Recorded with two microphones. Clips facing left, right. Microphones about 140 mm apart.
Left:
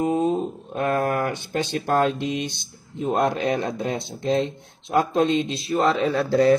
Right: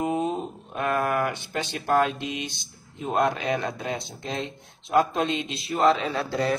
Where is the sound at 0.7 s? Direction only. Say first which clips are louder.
Left 2 dB; 30° left (ahead or behind).